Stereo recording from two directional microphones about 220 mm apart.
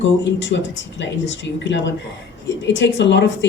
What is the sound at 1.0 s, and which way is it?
Speech, 55° left (ahead or behind).